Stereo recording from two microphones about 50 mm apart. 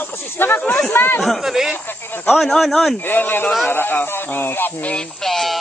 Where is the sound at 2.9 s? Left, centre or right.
Left.